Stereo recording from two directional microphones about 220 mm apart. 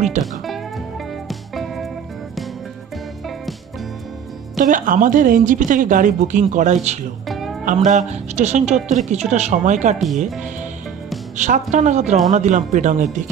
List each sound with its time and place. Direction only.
0.2 s speech: 30° right (ahead or behind)
1.5 s music: centre (ahead or behind)
4.6 s speech: 35° right (ahead or behind)
7.2 s music: centre (ahead or behind)
7.7 s speech: 30° right (ahead or behind)
11.3 s speech: 35° right (ahead or behind)